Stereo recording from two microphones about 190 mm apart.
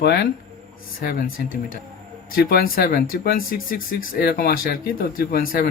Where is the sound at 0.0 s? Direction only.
60° left (ahead or behind).